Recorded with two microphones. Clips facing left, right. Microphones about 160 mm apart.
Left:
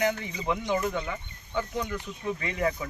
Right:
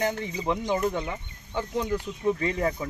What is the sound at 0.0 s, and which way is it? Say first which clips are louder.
Speech: even; 30° right (ahead or behind).